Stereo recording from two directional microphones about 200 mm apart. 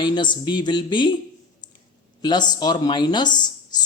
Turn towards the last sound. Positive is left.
turn(degrees=20)  # may be behind; listen again after turning